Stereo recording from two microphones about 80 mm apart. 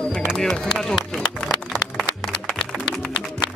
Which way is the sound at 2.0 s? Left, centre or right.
Centre.